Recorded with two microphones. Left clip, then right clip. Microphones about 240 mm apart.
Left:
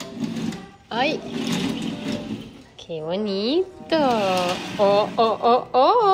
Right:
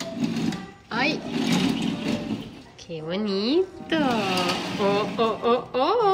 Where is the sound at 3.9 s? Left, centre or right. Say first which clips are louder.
Left 4 dB; centre.